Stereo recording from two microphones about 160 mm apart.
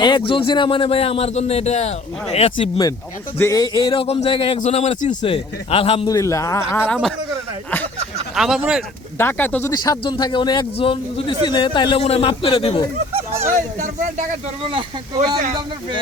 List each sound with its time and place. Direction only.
0.0 s speech: 30° left (ahead or behind)
3.3 s speech: 20° left (ahead or behind); by 6.1 s 35° left (ahead or behind)
6.1 s a man's voice: 20° left (ahead or behind)
8.4 s speech: centre (ahead or behind)
9.1 s a man's voice: 15° left (ahead or behind); by 12.8 s 35° left (ahead or behind)
13.5 s speech: 55° right (ahead or behind)
14.6 s speech: 30° right (ahead or behind)